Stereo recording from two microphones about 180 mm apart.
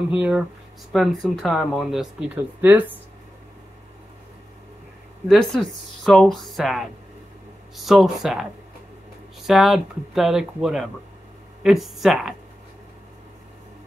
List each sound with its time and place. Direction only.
0.1 s speech: 5° right (ahead or behind)
5.3 s speech: centre (ahead or behind)
9.5 s speech: centre (ahead or behind)